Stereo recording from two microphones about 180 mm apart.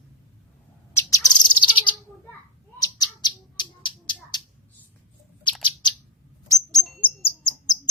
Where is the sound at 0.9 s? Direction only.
20° left (ahead or behind).